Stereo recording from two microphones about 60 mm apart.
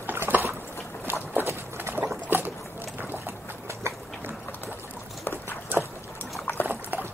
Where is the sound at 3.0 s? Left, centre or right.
Right.